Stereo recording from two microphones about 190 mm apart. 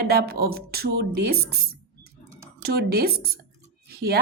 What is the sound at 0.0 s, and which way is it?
A woman's voice, 55° right (ahead or behind).